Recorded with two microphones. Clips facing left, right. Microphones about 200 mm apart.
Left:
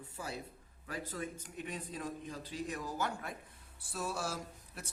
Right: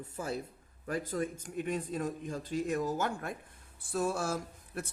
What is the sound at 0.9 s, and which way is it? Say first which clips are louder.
Speech: right 7 dB; 45° right (ahead or behind).